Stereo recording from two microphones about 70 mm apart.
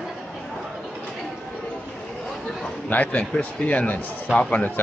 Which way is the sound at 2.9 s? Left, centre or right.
Left.